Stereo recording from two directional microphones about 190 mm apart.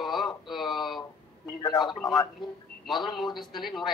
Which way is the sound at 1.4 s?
20° left (ahead or behind).